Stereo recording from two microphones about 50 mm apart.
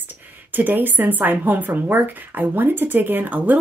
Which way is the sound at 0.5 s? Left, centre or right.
Right.